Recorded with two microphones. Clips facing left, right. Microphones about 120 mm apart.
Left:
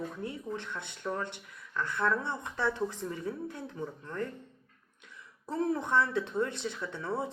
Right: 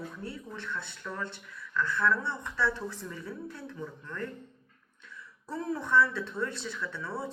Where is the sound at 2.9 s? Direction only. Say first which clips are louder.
Left 4 dB; 45° left (ahead or behind).